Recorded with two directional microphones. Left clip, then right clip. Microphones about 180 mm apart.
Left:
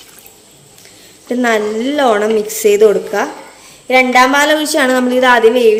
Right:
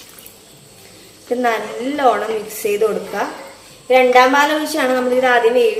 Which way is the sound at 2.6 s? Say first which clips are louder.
Left 8 dB; 65° left (ahead or behind).